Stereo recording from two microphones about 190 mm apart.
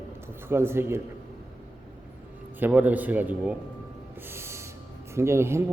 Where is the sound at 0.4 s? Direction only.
10° right (ahead or behind).